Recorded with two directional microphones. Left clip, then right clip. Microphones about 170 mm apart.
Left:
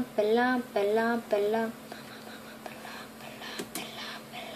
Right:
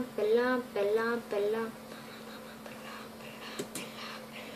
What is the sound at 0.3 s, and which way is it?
Speech, 50° left (ahead or behind).